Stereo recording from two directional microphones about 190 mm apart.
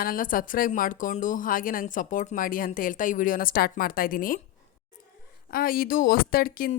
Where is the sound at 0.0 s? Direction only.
45° left (ahead or behind).